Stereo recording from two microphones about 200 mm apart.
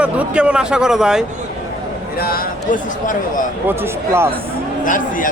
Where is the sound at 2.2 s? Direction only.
45° left (ahead or behind).